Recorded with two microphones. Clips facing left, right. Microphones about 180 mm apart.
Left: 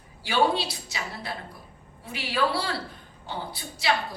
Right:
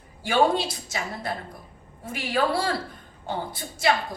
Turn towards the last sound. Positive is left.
turn(degrees=-45)  # may be behind; listen again after turning